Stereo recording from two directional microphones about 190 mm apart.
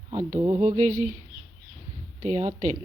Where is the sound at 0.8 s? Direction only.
40° right (ahead or behind).